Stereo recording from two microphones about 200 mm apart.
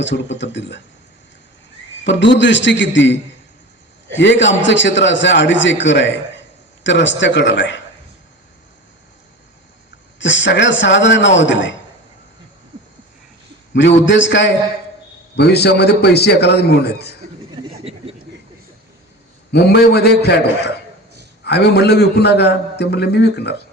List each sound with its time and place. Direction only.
0.0 s a man's voice: 65° left (ahead or behind)
2.0 s a man's voice: 65° left (ahead or behind)
4.2 s a man's voice: 65° left (ahead or behind)
10.2 s a man's voice: 65° left (ahead or behind)
13.7 s a man's voice: 70° left (ahead or behind)
15.4 s a man's voice: 55° left (ahead or behind)
19.5 s a man's voice: 55° left (ahead or behind)